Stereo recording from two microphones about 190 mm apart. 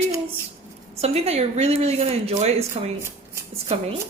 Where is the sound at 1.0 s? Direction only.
35° right (ahead or behind).